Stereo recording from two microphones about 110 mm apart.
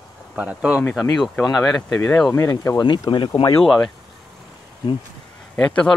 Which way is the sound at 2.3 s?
30° left (ahead or behind).